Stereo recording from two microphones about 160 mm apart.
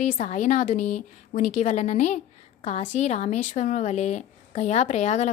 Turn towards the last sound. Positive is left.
turn(degrees=45)  # may be behind; listen again after turning